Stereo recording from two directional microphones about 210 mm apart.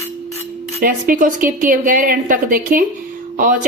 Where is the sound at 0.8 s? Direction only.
40° right (ahead or behind).